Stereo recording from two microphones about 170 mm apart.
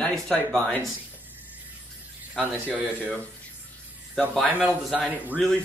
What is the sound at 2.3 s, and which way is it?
Speech, 10° right (ahead or behind).